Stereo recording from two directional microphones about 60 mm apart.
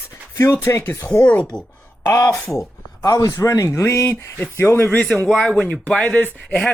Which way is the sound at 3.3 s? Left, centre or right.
Left.